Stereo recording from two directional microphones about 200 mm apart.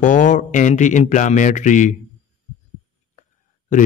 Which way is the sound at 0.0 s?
40° left (ahead or behind).